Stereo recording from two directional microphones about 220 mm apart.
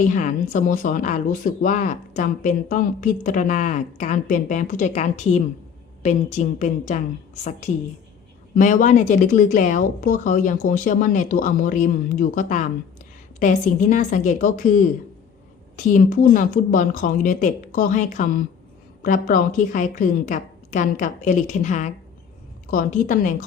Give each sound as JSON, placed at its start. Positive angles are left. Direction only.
{"t": 0.0, "sound": "speech", "side_deg": 35}
{"t": 8.5, "sound": "speech", "side_deg": 35}